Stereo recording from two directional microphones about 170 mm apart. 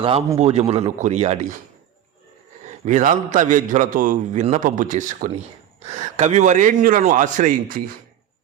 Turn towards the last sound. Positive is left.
turn(degrees=-50)  # may be behind; listen again after turning